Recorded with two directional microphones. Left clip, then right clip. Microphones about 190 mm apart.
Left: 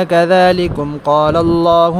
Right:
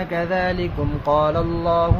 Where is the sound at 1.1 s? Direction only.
35° left (ahead or behind); by 1.9 s 50° left (ahead or behind).